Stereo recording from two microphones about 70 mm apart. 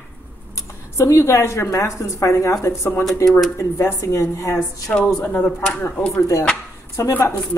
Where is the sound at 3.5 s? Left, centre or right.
Left.